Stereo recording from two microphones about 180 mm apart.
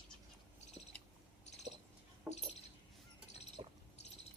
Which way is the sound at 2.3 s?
10° right (ahead or behind).